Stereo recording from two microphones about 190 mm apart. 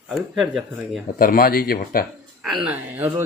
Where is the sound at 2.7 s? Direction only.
10° right (ahead or behind).